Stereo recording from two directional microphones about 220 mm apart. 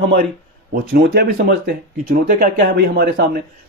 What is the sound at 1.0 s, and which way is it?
A man's voice, 45° right (ahead or behind).